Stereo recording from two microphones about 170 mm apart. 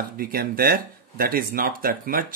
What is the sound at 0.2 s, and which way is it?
Speech, 60° right (ahead or behind).